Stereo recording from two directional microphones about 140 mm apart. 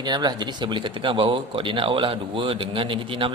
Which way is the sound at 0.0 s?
30° right (ahead or behind).